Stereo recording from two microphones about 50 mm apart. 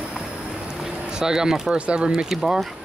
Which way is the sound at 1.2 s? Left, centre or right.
Centre.